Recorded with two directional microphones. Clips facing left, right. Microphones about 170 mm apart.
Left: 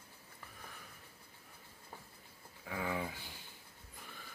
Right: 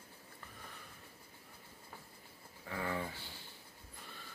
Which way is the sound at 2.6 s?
5° left (ahead or behind).